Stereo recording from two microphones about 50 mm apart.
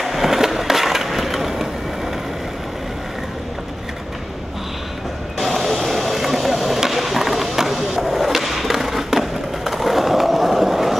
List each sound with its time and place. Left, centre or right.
0.0 s skateboard: centre
5.4 s vehicle: centre